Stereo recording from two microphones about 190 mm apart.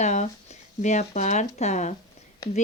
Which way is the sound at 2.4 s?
20° left (ahead or behind).